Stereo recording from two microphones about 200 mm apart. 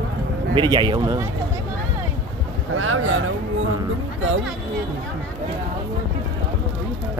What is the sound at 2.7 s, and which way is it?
Speech, 90° right.